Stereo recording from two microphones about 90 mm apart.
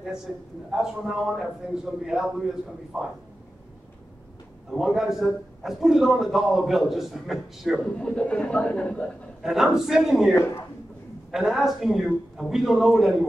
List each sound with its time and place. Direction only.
0.7 s a man's voice: 5° right (ahead or behind)
4.6 s a man's voice: centre (ahead or behind)
7.9 s speech: 10° left (ahead or behind)
9.4 s a man's voice: 5° right (ahead or behind)
10.3 s a man's voice: 30° left (ahead or behind)
11.3 s a man's voice: 5° right (ahead or behind)